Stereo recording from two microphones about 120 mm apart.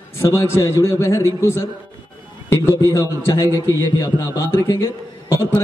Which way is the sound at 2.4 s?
20° left (ahead or behind).